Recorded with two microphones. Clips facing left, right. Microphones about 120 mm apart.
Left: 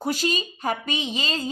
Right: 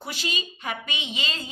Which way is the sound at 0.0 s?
40° left (ahead or behind).